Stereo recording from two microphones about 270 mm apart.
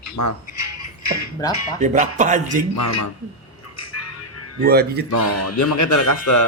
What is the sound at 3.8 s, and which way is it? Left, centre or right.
Music, left.